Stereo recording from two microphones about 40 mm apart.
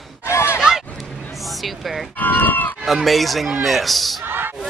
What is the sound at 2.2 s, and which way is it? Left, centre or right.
Livestock, left.